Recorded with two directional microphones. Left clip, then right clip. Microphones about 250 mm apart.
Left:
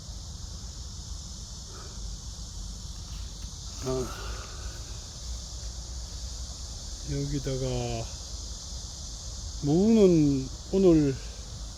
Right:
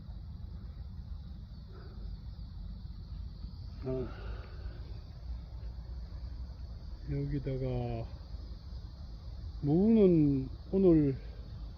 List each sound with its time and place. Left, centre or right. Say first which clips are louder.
3.8 s speech: left 6 dB; centre
7.1 s speech: left 5 dB; centre
9.6 s speech: left 5 dB; centre